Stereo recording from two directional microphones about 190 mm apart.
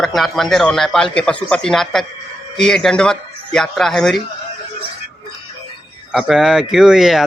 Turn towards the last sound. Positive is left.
turn(degrees=0)  # may be behind; listen again after turning